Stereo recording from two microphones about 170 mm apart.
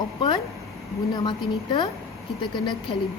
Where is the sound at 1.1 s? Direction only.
25° left (ahead or behind).